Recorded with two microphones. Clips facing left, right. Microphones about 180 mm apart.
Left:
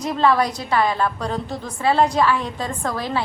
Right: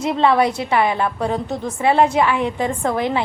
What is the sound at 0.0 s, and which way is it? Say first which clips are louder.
A woman's voice: right 3 dB; 25° right (ahead or behind).